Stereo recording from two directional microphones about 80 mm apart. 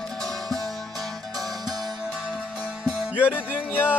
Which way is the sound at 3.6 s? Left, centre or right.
Left.